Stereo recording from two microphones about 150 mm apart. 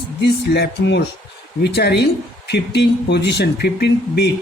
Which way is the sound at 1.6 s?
90° left.